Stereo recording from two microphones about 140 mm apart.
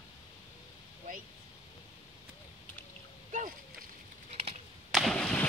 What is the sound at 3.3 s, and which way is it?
Splash, 65° right (ahead or behind).